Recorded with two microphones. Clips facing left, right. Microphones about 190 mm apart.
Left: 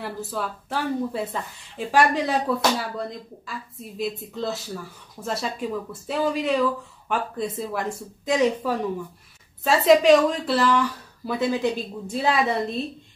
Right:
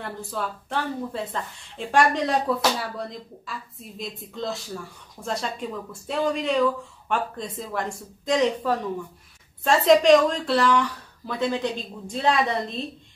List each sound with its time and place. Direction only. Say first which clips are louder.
0.0 s a woman's voice: left 1 dB; 5° left (ahead or behind)